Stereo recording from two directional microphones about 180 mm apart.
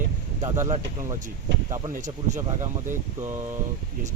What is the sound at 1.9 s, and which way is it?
Speech, 40° right (ahead or behind).